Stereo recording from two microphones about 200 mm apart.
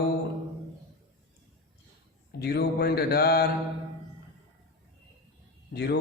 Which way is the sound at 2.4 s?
50° left (ahead or behind).